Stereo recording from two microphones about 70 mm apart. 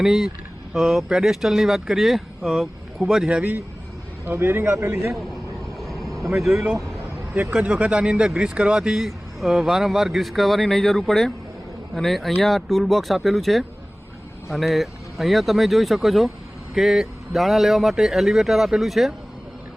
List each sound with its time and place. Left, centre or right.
0.0 s speech: centre
3.2 s a man's voice: right
5.8 s vehicle: centre
6.4 s speech: centre
7.3 s speech: centre